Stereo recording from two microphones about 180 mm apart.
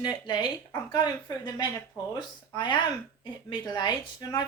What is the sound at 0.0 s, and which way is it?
A woman's voice, 25° left (ahead or behind).